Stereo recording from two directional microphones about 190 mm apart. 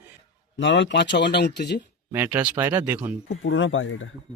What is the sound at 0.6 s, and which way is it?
Speech, 70° left (ahead or behind).